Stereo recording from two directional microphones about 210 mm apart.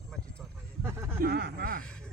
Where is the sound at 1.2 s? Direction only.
50° right (ahead or behind).